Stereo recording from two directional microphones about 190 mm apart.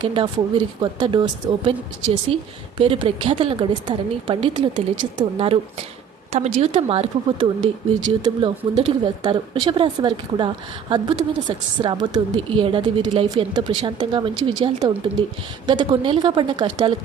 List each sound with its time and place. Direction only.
0.0 s speech: 25° right (ahead or behind)